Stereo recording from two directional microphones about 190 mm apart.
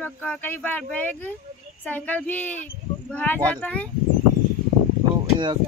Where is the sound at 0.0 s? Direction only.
10° left (ahead or behind).